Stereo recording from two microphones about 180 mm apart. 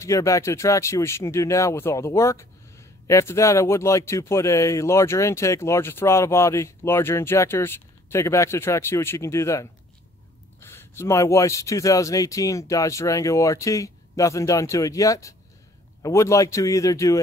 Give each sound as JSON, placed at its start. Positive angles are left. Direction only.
{"t": 0.0, "sound": "speech", "side_deg": 15}